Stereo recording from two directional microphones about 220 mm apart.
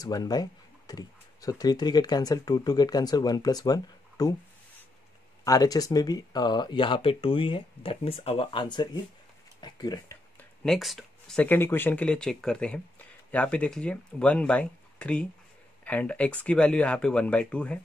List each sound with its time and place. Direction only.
0.0 s speech: 15° left (ahead or behind)
5.4 s speech: 15° left (ahead or behind)
10.6 s speech: centre (ahead or behind)